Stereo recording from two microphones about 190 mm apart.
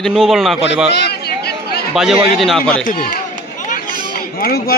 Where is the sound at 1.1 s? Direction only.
55° left (ahead or behind).